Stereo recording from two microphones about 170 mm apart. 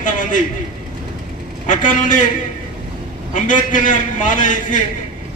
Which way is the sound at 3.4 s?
50° left (ahead or behind).